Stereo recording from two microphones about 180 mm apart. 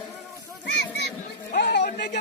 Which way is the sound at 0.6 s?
70° left (ahead or behind).